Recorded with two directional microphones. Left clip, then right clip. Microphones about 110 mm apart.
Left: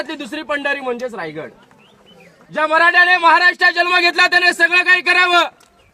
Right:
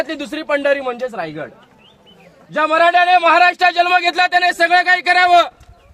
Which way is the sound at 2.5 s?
30° right (ahead or behind).